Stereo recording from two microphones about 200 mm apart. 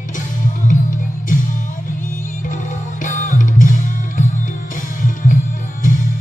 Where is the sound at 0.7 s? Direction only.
40° left (ahead or behind).